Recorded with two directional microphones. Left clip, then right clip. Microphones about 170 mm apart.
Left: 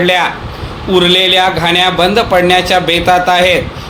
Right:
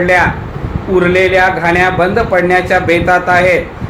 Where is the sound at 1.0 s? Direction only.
55° left (ahead or behind).